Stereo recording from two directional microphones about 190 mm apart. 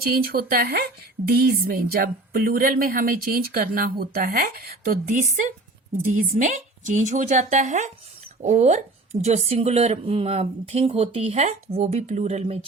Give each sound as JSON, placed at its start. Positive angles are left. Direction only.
{"t": 0.0, "sound": "a woman's voice", "side_deg": -55}